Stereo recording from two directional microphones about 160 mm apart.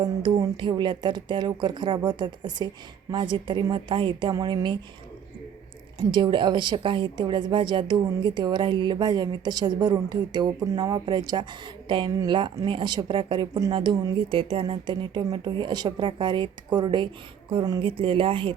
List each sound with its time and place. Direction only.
0.0 s a woman's voice: 30° right (ahead or behind)
6.1 s a woman's voice: 30° right (ahead or behind)